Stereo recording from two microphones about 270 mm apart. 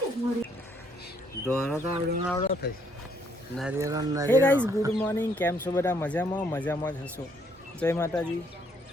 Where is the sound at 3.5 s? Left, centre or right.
Centre.